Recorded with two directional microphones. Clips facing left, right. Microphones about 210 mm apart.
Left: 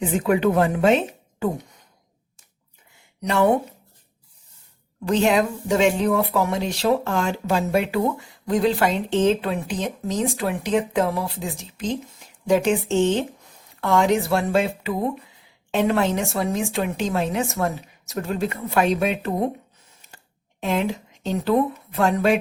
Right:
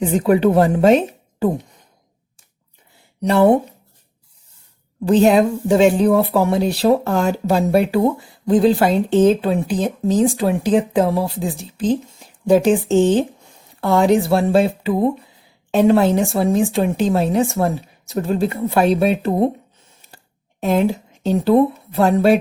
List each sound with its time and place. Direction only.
0.0 s a woman's voice: 35° right (ahead or behind)
3.2 s speech: 35° right (ahead or behind)
5.0 s a woman's voice: 35° right (ahead or behind)
20.6 s a woman's voice: 40° right (ahead or behind)